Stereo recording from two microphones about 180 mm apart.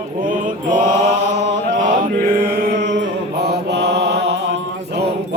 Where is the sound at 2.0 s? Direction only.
55° right (ahead or behind); by 5.0 s 80° right.